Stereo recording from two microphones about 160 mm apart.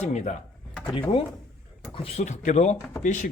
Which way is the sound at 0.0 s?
45° left (ahead or behind).